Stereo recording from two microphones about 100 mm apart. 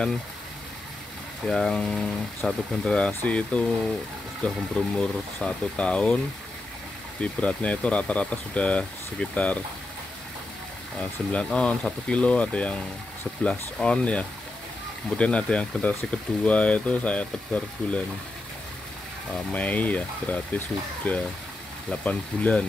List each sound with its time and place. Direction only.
1.4 s speech: 5° left (ahead or behind)
7.2 s speech: 10° left (ahead or behind)
11.0 s speech: 10° left (ahead or behind)
19.3 s speech: 15° left (ahead or behind)